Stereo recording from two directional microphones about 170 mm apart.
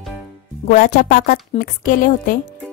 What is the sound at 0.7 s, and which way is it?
Speech, 55° left (ahead or behind).